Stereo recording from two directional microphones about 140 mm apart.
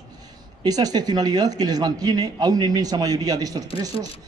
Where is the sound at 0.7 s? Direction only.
25° right (ahead or behind).